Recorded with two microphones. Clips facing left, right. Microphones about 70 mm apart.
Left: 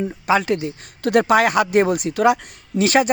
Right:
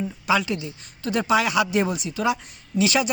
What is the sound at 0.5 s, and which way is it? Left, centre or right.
Speech, left.